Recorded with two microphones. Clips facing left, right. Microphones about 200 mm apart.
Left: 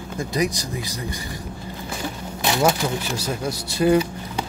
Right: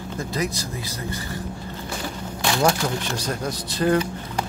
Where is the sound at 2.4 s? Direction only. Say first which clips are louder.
Left 1 dB; 20° left (ahead or behind).